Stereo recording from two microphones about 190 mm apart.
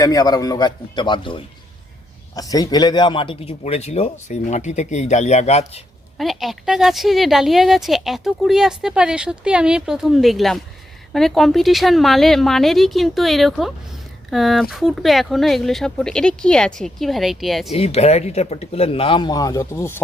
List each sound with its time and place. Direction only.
0.0 s a man's voice: 20° left (ahead or behind); by 5.8 s 35° left (ahead or behind)
6.1 s a woman's voice: centre (ahead or behind)
17.7 s a man's voice: 35° left (ahead or behind); by 20.0 s 15° left (ahead or behind)